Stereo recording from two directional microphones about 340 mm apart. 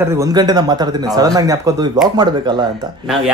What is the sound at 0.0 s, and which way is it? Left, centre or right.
Speech, centre.